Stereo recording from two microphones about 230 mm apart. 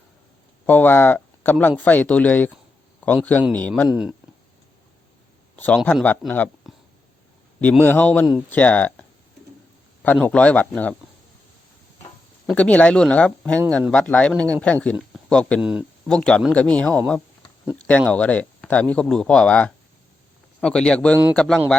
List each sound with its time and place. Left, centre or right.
0.7 s a man's voice: centre
5.5 s speech: centre
12.5 s speech: centre